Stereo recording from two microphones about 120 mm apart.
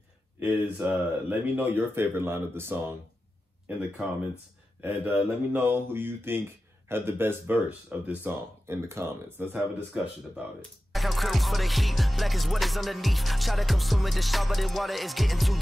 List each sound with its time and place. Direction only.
0.4 s speech: 15° right (ahead or behind)
4.8 s speech: 15° right (ahead or behind)
10.9 s music: centre (ahead or behind)